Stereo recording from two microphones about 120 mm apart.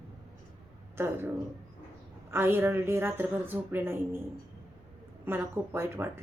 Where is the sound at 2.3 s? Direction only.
20° right (ahead or behind).